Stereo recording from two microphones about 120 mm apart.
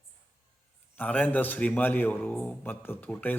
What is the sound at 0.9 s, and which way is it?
A man's voice, 10° left (ahead or behind).